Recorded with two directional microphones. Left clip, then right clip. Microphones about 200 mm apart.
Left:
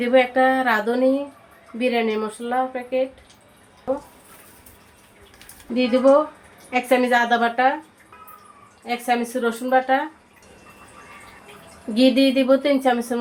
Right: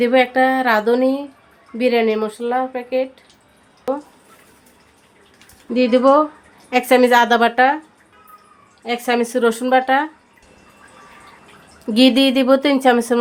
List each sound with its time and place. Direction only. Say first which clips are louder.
0.0 s speech: right 2 dB; 45° right (ahead or behind)
5.7 s speech: right 3 dB; 60° right (ahead or behind)
8.8 s speech: right 4 dB; 60° right (ahead or behind)
11.9 s speech: right 3 dB; 60° right (ahead or behind)